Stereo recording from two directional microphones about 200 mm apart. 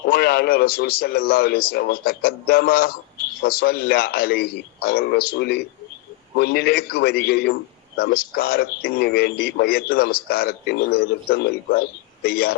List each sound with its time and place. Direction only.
0.0 s a man's voice: 55° left (ahead or behind)